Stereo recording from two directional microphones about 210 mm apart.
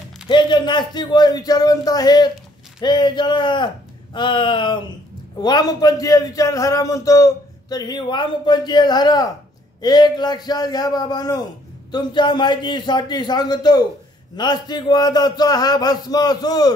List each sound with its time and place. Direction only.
0.3 s a man's voice: 20° left (ahead or behind)